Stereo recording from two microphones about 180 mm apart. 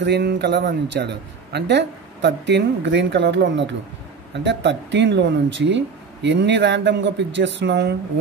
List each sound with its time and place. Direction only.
0.0 s speech: 70° right (ahead or behind)